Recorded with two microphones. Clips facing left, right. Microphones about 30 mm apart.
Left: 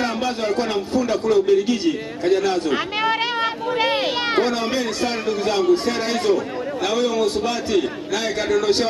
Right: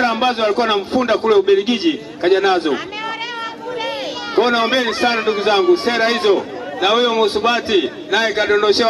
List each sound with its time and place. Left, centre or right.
0.0 s a man's voice: right
3.0 s a sound: left
4.4 s a man's voice: right